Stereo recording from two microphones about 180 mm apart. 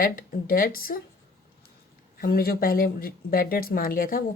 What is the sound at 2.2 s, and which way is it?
Speech, 55° left (ahead or behind).